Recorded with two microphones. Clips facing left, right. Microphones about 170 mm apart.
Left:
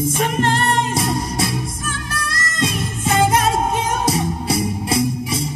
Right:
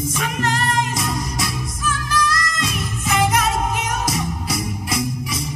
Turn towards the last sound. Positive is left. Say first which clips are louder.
# left 5 dB
turn(degrees=30)  # may be behind; listen again after turning